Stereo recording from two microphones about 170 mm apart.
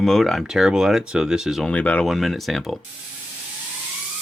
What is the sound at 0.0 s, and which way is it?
Speech, centre (ahead or behind).